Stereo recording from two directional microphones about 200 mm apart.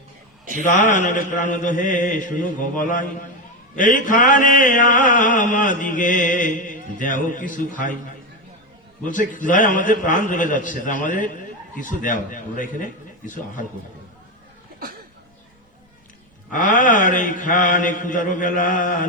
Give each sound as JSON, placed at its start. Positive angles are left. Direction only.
{"t": 0.6, "sound": "mantra", "side_deg": 40}
{"t": 9.0, "sound": "mantra", "side_deg": 40}
{"t": 16.5, "sound": "mantra", "side_deg": 40}